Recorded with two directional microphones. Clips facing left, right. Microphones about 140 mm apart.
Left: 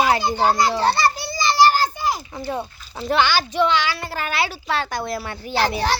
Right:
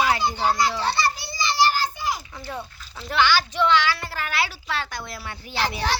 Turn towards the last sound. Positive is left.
turn(degrees=35)  # may be behind; listen again after turning